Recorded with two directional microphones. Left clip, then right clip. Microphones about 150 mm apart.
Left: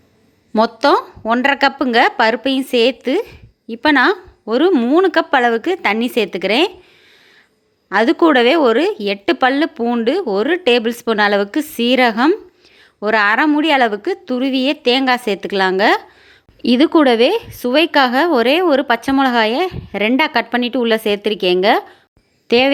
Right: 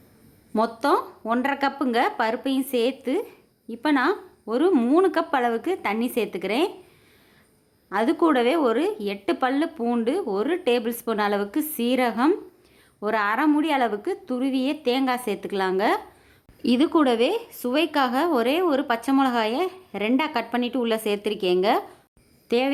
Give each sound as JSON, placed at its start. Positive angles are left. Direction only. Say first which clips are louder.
{"t": 0.5, "sound": "a woman's voice", "louder": "left 9 dB", "side_deg": 25}
{"t": 4.7, "sound": "a woman's voice", "louder": "left 6 dB", "side_deg": 15}
{"t": 4.9, "sound": "a woman's voice", "louder": "left 8 dB", "side_deg": 25}
{"t": 7.9, "sound": "a woman's voice", "louder": "left 9 dB", "side_deg": 25}